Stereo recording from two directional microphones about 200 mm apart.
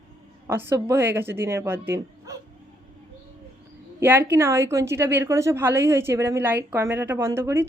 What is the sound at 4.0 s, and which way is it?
A woman's voice, 10° right (ahead or behind).